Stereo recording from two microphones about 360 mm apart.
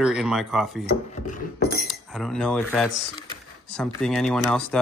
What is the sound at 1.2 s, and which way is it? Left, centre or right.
Mechanisms, left.